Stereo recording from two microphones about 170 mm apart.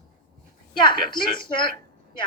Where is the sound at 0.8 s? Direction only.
25° left (ahead or behind).